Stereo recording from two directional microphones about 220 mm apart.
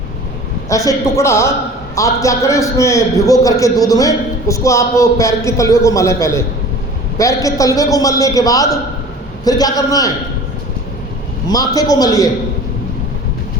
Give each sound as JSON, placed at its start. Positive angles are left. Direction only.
{"t": 0.7, "sound": "a man's voice", "side_deg": 15}
{"t": 11.4, "sound": "a man's voice", "side_deg": 15}